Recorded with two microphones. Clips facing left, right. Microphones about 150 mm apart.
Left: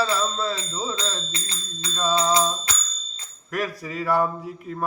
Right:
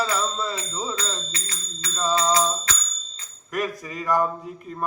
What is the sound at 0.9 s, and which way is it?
Music, 25° left (ahead or behind).